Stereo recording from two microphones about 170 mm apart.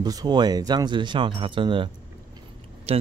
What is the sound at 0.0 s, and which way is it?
Speech, 25° right (ahead or behind).